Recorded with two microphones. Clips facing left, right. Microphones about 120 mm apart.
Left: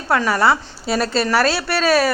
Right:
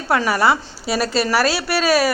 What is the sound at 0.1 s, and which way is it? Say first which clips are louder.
A woman's voice: even; 20° right (ahead or behind).